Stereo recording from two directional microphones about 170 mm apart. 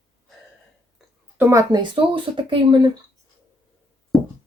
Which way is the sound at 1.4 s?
15° right (ahead or behind).